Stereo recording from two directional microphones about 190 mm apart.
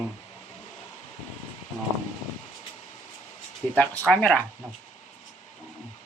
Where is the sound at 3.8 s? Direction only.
5° left (ahead or behind).